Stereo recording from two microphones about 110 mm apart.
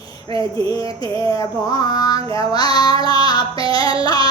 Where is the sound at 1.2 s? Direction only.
50° right (ahead or behind).